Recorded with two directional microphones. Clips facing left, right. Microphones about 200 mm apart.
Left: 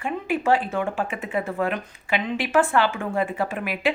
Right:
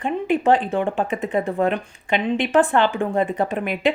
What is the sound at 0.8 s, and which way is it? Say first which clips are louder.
Speech: right 4 dB; 35° right (ahead or behind).